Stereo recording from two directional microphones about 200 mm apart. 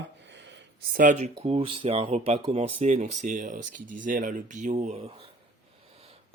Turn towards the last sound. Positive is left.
turn(degrees=-35)  # may be behind; listen again after turning